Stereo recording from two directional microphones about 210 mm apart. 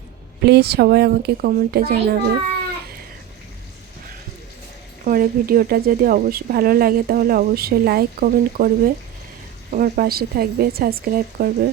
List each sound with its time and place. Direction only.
0.4 s speech: 50° right (ahead or behind)
5.0 s speech: 45° right (ahead or behind)